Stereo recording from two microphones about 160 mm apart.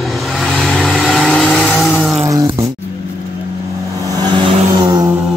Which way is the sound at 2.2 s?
20° right (ahead or behind).